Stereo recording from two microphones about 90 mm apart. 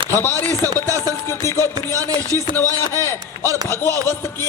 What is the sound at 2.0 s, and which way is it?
Speech, 40° right (ahead or behind).